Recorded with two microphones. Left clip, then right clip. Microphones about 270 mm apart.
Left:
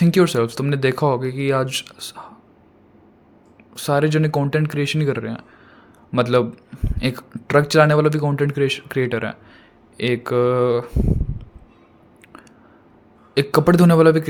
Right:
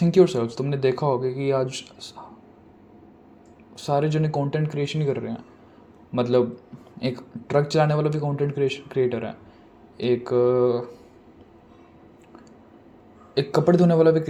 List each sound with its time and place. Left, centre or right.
0.0 s speech: left
3.8 s speech: left
13.3 s speech: left